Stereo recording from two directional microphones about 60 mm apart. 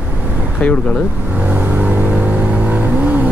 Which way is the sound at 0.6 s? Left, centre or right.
Centre.